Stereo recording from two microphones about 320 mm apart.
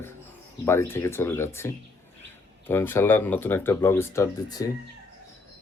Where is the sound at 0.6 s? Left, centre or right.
Centre.